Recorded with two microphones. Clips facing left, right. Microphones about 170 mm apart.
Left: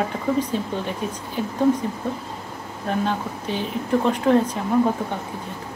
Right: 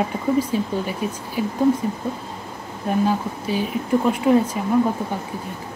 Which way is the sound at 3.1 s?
5° right (ahead or behind).